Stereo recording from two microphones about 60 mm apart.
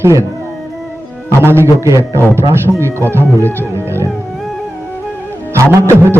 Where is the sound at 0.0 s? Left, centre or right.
Right.